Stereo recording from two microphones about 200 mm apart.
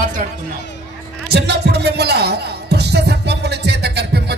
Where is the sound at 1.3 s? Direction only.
55° right (ahead or behind).